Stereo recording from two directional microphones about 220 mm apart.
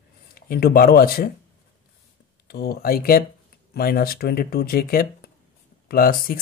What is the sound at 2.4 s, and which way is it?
Speech, 45° left (ahead or behind).